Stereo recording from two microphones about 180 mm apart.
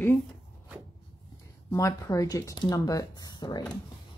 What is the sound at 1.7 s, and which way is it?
Speech, 20° left (ahead or behind).